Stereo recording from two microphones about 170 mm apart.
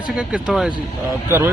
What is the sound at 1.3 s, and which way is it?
Speech, 15° right (ahead or behind).